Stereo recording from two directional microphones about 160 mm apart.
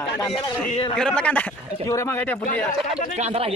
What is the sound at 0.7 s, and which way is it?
Speech, 35° left (ahead or behind).